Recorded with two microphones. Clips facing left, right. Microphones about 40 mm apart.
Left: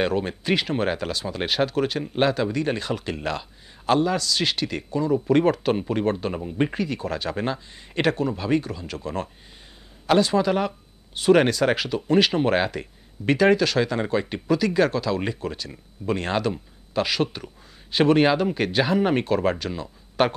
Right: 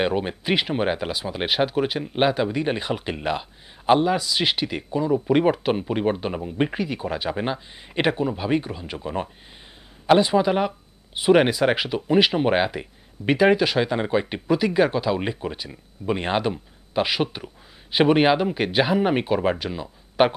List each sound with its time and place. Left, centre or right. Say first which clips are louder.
0.0 s speech: even; centre